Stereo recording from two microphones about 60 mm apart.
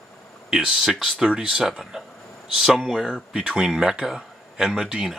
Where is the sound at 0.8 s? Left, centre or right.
Centre.